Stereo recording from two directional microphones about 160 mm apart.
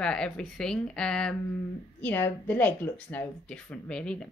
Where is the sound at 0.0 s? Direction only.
5° left (ahead or behind).